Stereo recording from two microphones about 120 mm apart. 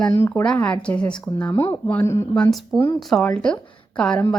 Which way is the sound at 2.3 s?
5° left (ahead or behind).